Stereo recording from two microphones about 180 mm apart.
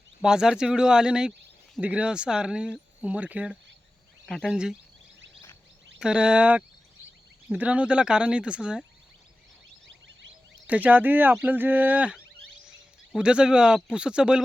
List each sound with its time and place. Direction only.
0.2 s speech: 5° right (ahead or behind)
6.0 s speech: 5° right (ahead or behind)
9.8 s a sound: 80° right
10.7 s speech: 10° right (ahead or behind)